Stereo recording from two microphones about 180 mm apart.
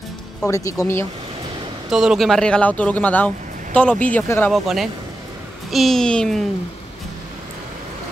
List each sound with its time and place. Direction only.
0.5 s speech: 15° left (ahead or behind)
1.9 s speech: centre (ahead or behind)
5.7 s speech: centre (ahead or behind)